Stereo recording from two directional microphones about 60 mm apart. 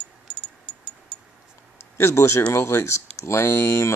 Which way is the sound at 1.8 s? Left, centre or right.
Left.